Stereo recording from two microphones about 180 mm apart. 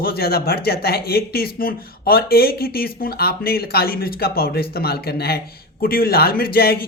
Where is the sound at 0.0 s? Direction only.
60° left (ahead or behind).